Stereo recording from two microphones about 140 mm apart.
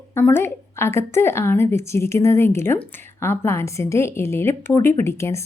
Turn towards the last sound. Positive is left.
turn(degrees=20)  # may be behind; listen again after turning